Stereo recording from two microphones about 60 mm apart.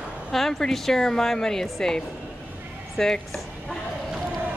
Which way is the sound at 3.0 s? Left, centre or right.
Centre.